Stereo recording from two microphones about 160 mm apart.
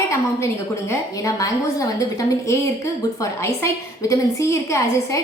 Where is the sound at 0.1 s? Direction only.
15° left (ahead or behind).